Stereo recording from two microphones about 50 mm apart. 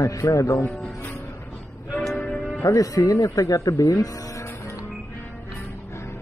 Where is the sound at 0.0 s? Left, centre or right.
Left.